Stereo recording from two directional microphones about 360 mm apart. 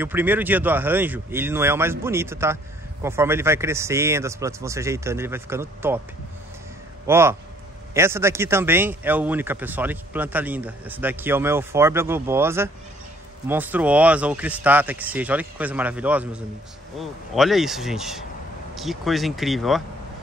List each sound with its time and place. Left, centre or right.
0.0 s speech: centre
7.1 s a man's voice: centre